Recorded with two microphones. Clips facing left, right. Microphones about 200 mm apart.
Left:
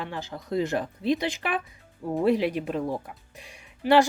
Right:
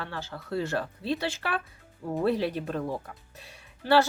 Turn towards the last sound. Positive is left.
turn(degrees=15)  # may be behind; listen again after turning